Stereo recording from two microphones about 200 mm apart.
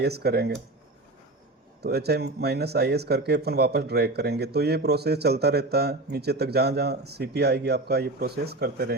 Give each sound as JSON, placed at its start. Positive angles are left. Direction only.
{"t": 0.0, "sound": "speech", "side_deg": -55}
{"t": 1.8, "sound": "speech", "side_deg": -55}